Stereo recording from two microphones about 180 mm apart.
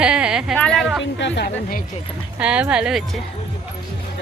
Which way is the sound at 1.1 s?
75° left (ahead or behind).